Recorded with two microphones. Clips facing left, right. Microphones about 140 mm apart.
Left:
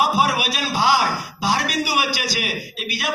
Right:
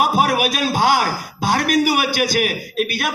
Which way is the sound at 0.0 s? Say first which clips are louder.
Right 2 dB; 50° right (ahead or behind).